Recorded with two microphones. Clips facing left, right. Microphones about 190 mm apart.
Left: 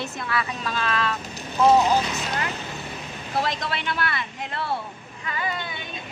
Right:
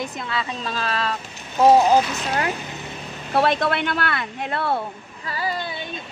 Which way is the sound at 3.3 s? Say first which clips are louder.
Right 7 dB; 60° right (ahead or behind).